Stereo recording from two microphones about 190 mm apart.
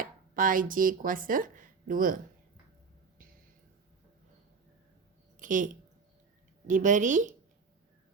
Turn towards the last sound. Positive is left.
turn(degrees=-40)  # may be behind; listen again after turning